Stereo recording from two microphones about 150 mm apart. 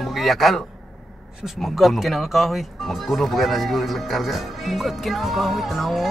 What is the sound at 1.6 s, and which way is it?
Speech, centre (ahead or behind).